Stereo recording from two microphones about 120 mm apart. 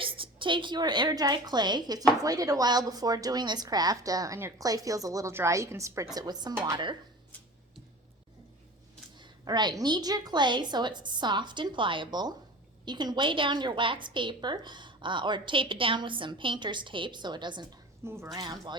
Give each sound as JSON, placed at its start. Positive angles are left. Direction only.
{"t": 0.0, "sound": "a woman's voice", "side_deg": -45}
{"t": 9.1, "sound": "a woman's voice", "side_deg": -35}
{"t": 18.0, "sound": "a woman's voice", "side_deg": -20}
{"t": 18.3, "sound": "a woman's voice", "side_deg": -35}